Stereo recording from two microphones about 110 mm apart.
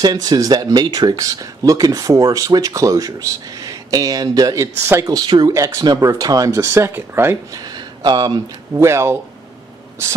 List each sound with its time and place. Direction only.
0.0 s speech: 35° right (ahead or behind)
4.8 s speech: 20° right (ahead or behind)
5.1 s speech: 40° right (ahead or behind); by 7.3 s 20° right (ahead or behind)
7.5 s a sound: 40° right (ahead or behind)
8.7 s speech: 25° right (ahead or behind)